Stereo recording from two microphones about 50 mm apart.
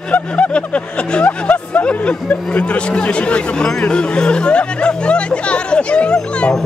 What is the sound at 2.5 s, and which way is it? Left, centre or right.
Speech, left.